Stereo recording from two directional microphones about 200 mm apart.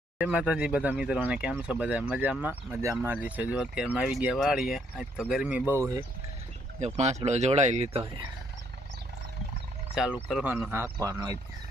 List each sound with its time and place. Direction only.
0.2 s speech: 5° right (ahead or behind)
6.7 s speech: 35° right (ahead or behind)
9.9 s speech: 5° right (ahead or behind)